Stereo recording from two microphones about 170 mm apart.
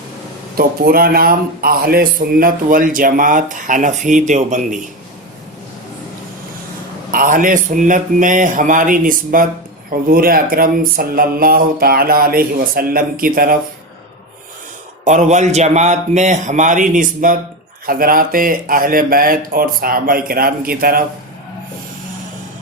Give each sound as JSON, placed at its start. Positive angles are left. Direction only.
{"t": 0.5, "sound": "a man's voice", "side_deg": -60}
{"t": 7.1, "sound": "a man's voice", "side_deg": -55}
{"t": 15.0, "sound": "a man's voice", "side_deg": -45}